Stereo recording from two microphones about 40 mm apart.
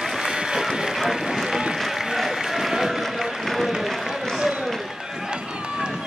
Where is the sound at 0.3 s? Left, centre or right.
Centre.